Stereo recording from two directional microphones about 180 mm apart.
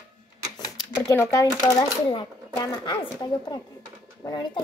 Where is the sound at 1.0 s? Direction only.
15° left (ahead or behind).